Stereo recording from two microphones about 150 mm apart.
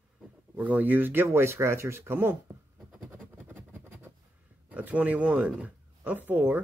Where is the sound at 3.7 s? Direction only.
15° right (ahead or behind).